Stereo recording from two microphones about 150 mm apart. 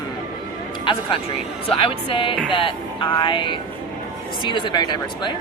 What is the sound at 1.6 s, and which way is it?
Speech, 35° left (ahead or behind).